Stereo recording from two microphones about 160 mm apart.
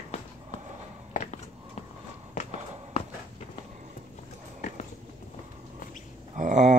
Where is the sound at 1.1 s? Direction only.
45° left (ahead or behind).